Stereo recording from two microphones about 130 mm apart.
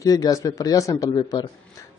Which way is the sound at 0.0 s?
25° left (ahead or behind).